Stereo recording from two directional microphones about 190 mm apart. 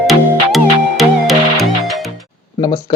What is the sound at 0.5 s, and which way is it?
Music, centre (ahead or behind).